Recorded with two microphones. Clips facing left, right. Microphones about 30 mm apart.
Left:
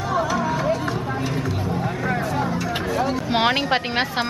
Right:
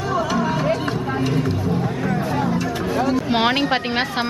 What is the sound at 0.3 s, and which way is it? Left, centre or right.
Music, right.